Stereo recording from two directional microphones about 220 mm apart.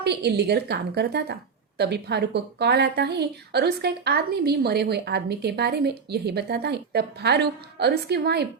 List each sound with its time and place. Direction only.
0.0 s speech: 50° right (ahead or behind)